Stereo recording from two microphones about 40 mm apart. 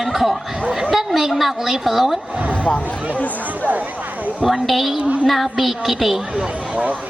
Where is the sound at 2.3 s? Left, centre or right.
Right.